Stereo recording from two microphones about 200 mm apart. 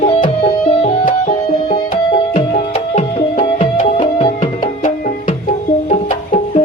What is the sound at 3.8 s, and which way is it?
Music, 25° left (ahead or behind).